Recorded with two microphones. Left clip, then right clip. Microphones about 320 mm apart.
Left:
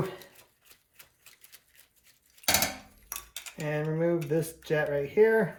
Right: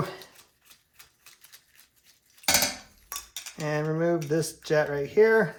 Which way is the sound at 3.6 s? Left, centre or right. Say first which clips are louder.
Right 2 dB; centre.